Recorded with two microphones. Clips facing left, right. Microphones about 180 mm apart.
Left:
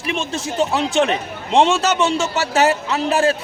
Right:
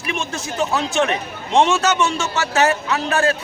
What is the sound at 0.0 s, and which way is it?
A man's voice, 30° left (ahead or behind).